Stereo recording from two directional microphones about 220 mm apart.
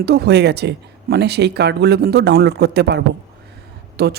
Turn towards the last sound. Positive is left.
turn(degrees=-45)  # may be behind; listen again after turning